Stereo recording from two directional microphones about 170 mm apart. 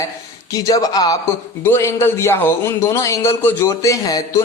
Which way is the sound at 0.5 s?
20° left (ahead or behind).